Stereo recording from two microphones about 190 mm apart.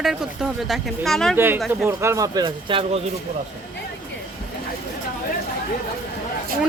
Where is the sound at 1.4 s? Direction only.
10° right (ahead or behind); by 3.0 s 25° right (ahead or behind).